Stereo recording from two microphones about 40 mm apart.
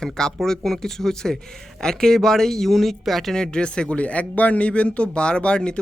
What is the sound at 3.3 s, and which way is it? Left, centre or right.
Speech, centre.